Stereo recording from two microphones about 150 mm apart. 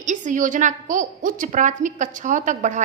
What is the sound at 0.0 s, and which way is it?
A woman's voice, 55° right (ahead or behind).